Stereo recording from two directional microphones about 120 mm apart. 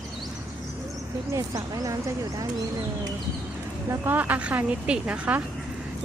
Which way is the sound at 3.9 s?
15° right (ahead or behind).